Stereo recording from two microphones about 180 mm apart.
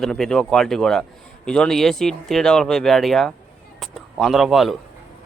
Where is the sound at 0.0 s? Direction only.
5° left (ahead or behind).